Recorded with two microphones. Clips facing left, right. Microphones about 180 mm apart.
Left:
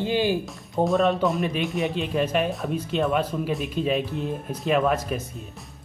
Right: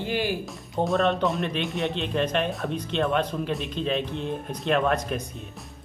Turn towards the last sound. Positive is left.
turn(degrees=5)  # may be behind; listen again after turning